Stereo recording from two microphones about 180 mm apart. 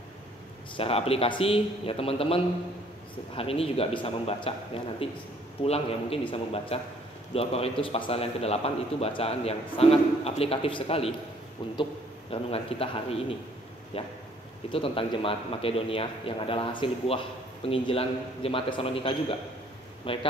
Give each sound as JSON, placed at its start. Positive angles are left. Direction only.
{"t": 0.7, "sound": "a man's voice", "side_deg": 30}